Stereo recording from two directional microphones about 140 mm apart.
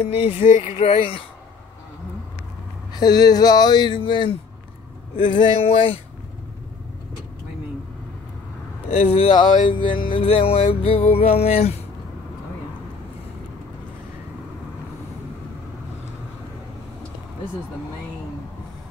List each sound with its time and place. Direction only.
0.1 s speech: 45° left (ahead or behind)
0.5 s speech: 60° left (ahead or behind)
2.9 s speech: 30° left (ahead or behind)
8.9 s speech: 45° left (ahead or behind)